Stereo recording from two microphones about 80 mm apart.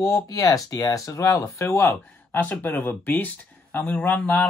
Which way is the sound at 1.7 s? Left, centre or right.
Left.